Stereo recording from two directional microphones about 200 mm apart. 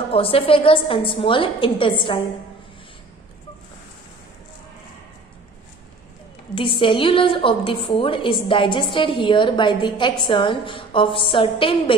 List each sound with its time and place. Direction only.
0.1 s a woman's voice: 25° left (ahead or behind)
6.5 s a woman's voice: 25° left (ahead or behind)